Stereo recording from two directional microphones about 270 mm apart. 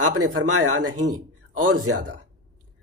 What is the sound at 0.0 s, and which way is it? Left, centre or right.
A man's voice, right.